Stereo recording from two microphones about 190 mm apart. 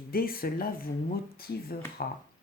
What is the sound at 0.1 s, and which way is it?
Speech, 50° left (ahead or behind).